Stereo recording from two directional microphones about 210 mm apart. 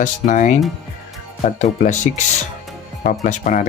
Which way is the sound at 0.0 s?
35° left (ahead or behind).